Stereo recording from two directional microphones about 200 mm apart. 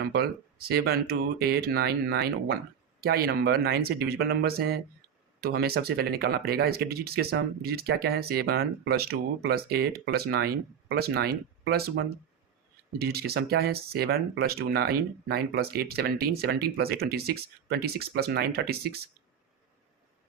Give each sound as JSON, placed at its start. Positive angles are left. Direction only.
{"t": 0.0, "sound": "speech", "side_deg": -55}